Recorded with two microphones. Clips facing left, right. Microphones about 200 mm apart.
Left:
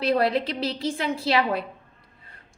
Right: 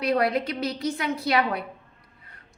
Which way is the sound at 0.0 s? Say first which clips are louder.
Left 1 dB; 30° left (ahead or behind).